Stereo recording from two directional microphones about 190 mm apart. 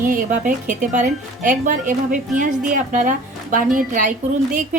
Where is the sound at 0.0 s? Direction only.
45° right (ahead or behind).